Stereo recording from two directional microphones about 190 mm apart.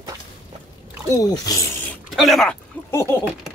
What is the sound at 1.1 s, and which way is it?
Speech, 20° left (ahead or behind).